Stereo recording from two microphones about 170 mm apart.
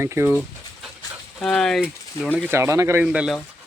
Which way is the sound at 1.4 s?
5° left (ahead or behind).